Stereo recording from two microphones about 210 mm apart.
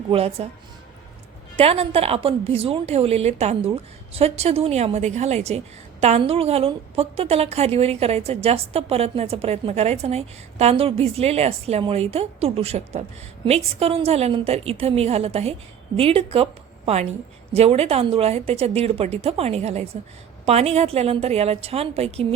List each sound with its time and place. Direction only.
0.1 s a woman's voice: 30° right (ahead or behind)
1.5 s a woman's voice: 30° right (ahead or behind)